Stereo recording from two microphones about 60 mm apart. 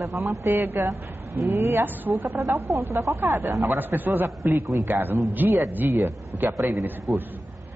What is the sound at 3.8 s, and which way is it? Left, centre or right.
A woman's voice, right.